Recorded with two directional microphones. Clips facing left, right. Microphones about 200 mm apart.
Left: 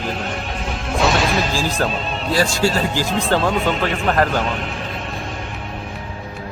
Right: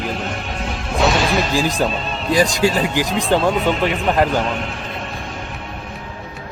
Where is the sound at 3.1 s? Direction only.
Centre (ahead or behind).